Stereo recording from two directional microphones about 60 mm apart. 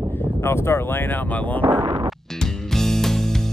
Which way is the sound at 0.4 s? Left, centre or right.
Left.